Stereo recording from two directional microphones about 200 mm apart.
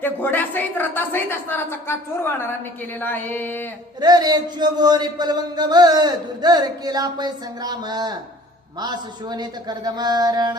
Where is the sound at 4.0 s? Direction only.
20° right (ahead or behind).